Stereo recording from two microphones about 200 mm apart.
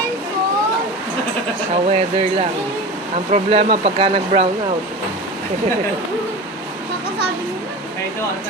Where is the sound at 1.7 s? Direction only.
35° right (ahead or behind).